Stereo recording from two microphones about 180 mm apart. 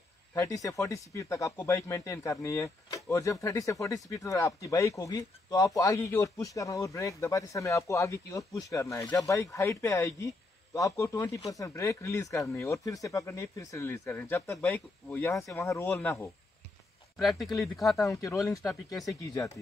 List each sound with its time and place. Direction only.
0.3 s speech: 15° left (ahead or behind); by 17.9 s centre (ahead or behind)
17.9 s speech: 15° left (ahead or behind)